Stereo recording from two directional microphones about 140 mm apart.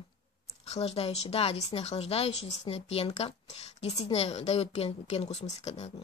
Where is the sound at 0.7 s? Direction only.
45° left (ahead or behind).